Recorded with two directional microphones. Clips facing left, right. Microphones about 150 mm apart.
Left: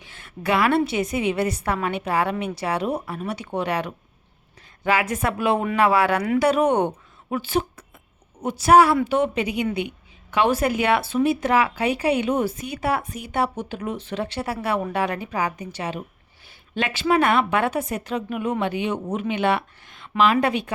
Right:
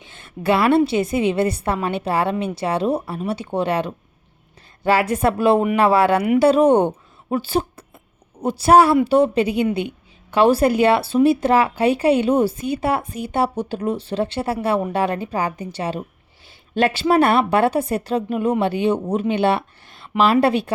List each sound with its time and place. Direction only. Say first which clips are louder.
0.0 s a woman's voice: right 5 dB; 25° right (ahead or behind)